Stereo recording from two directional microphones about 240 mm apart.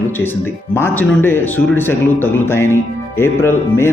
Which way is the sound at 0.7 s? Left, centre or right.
Centre.